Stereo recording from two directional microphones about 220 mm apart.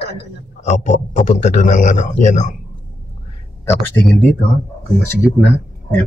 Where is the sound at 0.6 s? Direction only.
35° left (ahead or behind).